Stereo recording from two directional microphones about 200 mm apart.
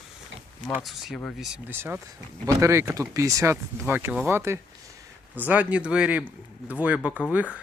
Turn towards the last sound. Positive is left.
turn(degrees=-5)  # may be behind; listen again after turning